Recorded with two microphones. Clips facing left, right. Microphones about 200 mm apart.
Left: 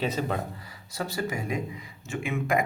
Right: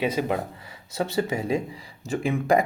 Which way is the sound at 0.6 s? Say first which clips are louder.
Right 5 dB; 25° right (ahead or behind).